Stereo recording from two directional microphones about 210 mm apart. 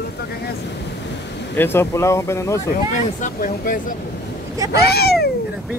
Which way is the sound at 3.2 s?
40° left (ahead or behind).